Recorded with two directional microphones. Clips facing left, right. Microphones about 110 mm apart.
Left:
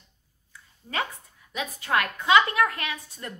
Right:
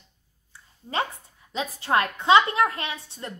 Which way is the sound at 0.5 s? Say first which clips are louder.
Right 3 dB; 30° right (ahead or behind).